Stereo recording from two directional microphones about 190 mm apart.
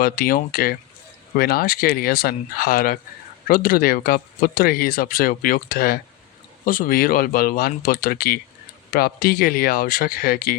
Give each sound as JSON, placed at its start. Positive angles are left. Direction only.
{"t": 0.0, "sound": "speech", "side_deg": 50}